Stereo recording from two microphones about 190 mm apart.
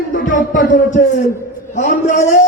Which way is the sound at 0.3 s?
45° left (ahead or behind).